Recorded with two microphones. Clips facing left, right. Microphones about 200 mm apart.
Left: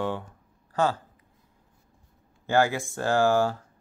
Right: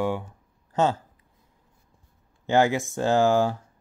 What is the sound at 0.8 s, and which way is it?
Speech, 20° right (ahead or behind).